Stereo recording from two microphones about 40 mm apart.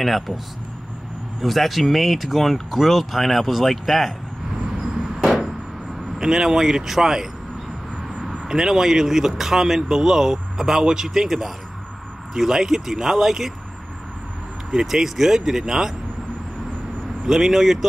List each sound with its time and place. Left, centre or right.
1.4 s speech: centre
5.2 s vehicle: centre
6.1 s speech: centre
8.5 s speech: centre
14.7 s speech: centre
17.3 s speech: centre